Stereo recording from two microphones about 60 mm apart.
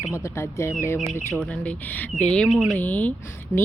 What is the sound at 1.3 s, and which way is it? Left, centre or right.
A woman's voice, left.